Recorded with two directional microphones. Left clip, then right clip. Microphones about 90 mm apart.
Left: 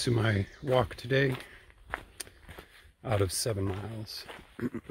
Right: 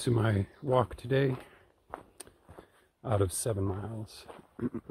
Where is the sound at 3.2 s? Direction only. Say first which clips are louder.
Left 1 dB; 25° right (ahead or behind).